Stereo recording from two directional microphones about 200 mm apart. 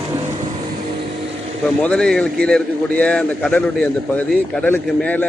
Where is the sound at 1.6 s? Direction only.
5° left (ahead or behind).